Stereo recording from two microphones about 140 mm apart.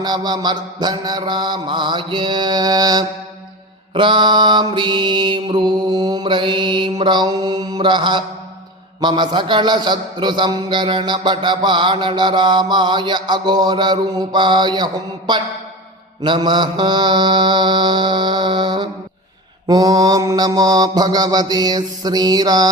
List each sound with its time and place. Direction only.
0.0 s a man's voice: 30° right (ahead or behind)
19.6 s mantra: 30° right (ahead or behind)